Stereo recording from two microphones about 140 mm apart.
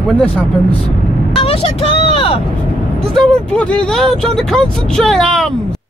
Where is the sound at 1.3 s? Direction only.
45° left (ahead or behind).